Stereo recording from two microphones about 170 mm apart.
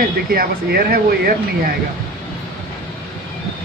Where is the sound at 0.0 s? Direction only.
60° right (ahead or behind).